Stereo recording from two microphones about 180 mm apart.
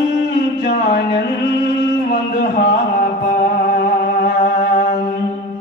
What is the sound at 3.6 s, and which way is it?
Music, 60° left (ahead or behind).